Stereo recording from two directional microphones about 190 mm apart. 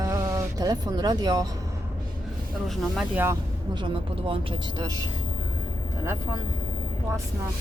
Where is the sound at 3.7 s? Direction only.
25° right (ahead or behind).